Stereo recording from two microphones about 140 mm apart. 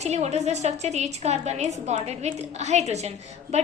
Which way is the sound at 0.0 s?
50° right (ahead or behind).